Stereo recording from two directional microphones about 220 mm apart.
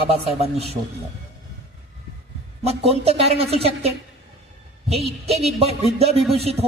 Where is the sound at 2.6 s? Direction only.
25° right (ahead or behind).